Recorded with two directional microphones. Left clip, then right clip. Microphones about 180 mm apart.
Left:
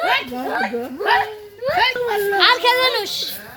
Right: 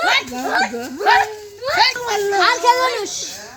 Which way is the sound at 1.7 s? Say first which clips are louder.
Right 2 dB; 30° right (ahead or behind).